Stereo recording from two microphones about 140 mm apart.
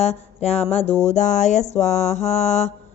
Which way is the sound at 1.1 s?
60° left (ahead or behind).